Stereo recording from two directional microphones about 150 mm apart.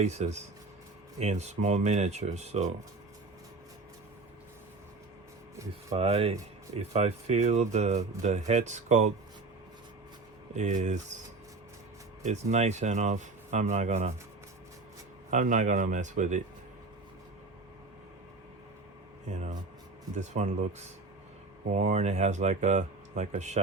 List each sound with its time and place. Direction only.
0.0 s speech: 50° right (ahead or behind)
5.9 s speech: 45° right (ahead or behind)
10.5 s speech: 50° right (ahead or behind)
12.2 s speech: 50° right (ahead or behind)
15.3 s a man's voice: 55° right (ahead or behind)
19.3 s speech: 50° right (ahead or behind)